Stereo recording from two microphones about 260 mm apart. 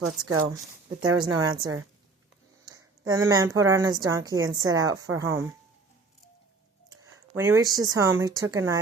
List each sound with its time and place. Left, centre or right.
0.2 s speech: right
1.2 s a woman's voice: centre
3.1 s a woman's voice: centre
6.9 s speech: centre